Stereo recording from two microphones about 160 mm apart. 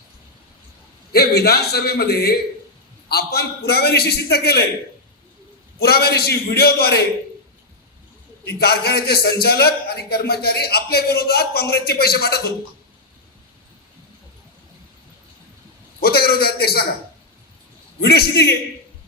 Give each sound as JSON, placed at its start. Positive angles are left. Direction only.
{"t": 1.1, "sound": "a man's voice", "side_deg": 85}
{"t": 5.8, "sound": "a man's voice", "side_deg": 80}
{"t": 8.5, "sound": "a man's voice", "side_deg": 80}
{"t": 16.0, "sound": "a man's voice", "side_deg": 75}
{"t": 18.0, "sound": "a man's voice", "side_deg": 85}